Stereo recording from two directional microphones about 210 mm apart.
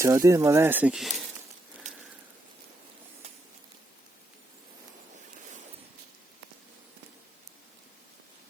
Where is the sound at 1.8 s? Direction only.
35° right (ahead or behind).